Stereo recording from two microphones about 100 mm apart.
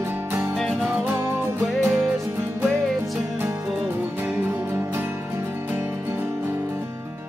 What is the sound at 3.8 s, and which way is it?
Music, 25° right (ahead or behind).